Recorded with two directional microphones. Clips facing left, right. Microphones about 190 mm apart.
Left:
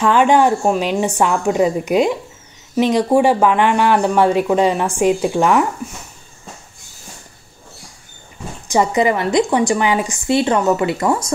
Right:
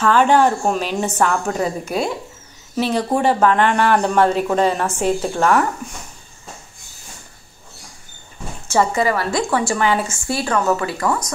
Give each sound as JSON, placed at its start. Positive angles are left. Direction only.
{"t": 0.0, "sound": "speech", "side_deg": 15}
{"t": 8.6, "sound": "a woman's voice", "side_deg": 15}